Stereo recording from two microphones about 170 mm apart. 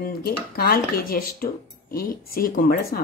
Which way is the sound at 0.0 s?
65° left (ahead or behind).